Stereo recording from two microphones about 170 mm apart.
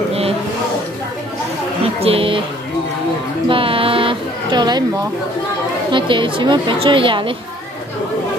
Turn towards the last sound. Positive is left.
turn(degrees=-30)  # may be behind; listen again after turning